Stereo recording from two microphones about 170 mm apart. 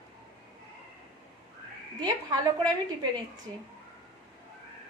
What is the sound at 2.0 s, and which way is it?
Speech, 25° right (ahead or behind).